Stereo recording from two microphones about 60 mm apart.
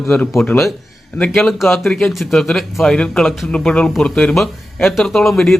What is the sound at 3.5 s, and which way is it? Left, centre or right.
Speech, centre.